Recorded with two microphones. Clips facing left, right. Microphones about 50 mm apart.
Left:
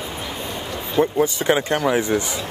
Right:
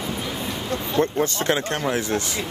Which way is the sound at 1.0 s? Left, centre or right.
Centre.